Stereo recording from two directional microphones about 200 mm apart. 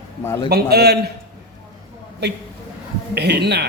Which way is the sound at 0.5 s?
50° right (ahead or behind).